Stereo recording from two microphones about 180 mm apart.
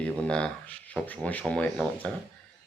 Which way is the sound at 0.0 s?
5° left (ahead or behind).